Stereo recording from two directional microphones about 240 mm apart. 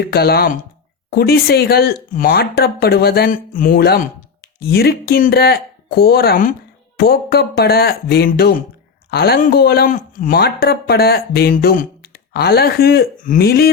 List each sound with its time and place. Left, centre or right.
0.1 s speech: left